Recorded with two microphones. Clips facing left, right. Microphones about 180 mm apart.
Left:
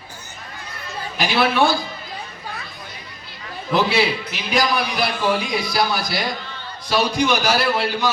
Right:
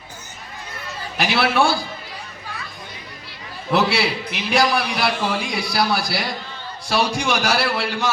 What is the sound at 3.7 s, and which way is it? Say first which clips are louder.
A man's voice: left 1 dB; 75° right (ahead or behind).